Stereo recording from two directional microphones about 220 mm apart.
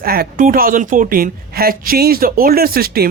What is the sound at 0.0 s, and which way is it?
A man's voice, 45° right (ahead or behind).